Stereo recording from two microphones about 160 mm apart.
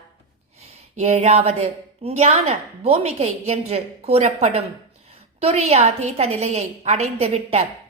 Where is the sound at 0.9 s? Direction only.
45° right (ahead or behind).